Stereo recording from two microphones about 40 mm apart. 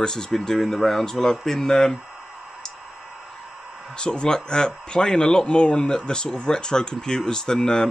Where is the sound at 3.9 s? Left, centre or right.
Left.